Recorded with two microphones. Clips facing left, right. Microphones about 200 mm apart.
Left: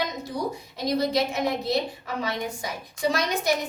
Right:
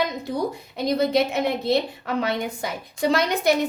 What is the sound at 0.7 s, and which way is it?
A woman's voice, 60° right (ahead or behind).